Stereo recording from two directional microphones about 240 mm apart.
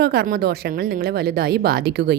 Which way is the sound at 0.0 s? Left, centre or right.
Right.